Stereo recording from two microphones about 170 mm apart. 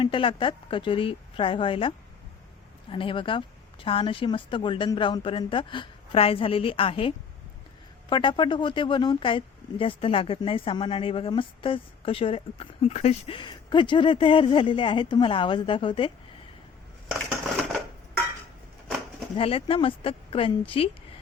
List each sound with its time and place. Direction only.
0.0 s speech: 30° left (ahead or behind)
2.9 s speech: 30° left (ahead or behind)
8.1 s speech: 30° left (ahead or behind)
19.4 s speech: 35° left (ahead or behind)